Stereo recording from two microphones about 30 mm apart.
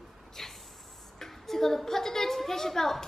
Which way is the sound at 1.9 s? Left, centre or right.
Centre.